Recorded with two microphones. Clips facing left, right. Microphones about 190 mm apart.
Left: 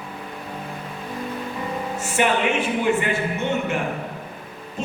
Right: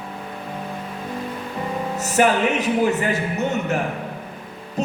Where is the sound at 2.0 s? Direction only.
40° right (ahead or behind).